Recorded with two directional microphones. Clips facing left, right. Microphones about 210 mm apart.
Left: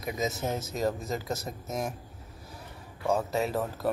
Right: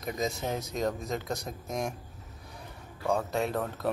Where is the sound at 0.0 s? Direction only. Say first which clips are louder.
Left 1 dB; 5° left (ahead or behind).